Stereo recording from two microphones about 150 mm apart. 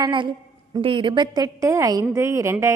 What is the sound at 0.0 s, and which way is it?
A woman's voice, 35° right (ahead or behind).